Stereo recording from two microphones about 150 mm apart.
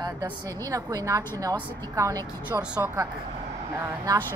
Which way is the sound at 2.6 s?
5° right (ahead or behind).